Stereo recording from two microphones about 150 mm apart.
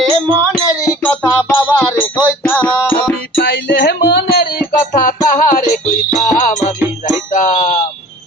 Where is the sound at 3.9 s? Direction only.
90° left; by 6.6 s 55° left (ahead or behind).